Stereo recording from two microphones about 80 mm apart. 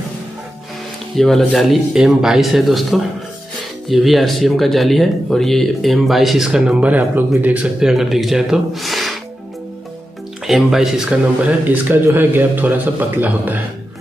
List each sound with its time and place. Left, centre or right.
1.1 s speech: centre
7.9 s speech: centre
10.4 s speech: centre
11.6 s a man's voice: right